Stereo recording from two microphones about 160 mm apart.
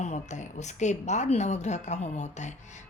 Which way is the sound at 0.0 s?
45° left (ahead or behind).